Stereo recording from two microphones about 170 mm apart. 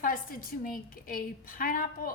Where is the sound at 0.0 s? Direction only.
55° left (ahead or behind).